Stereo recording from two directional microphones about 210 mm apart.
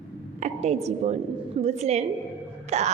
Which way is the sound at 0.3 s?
35° right (ahead or behind).